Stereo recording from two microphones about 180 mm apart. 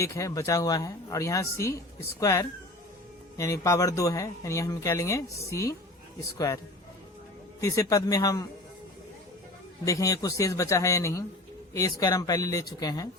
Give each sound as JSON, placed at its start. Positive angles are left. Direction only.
{"t": 0.0, "sound": "speech", "side_deg": 20}
{"t": 7.6, "sound": "speech", "side_deg": 20}
{"t": 9.8, "sound": "speech", "side_deg": 20}